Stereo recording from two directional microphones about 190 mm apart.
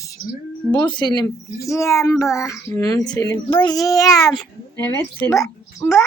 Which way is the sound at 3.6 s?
20° left (ahead or behind).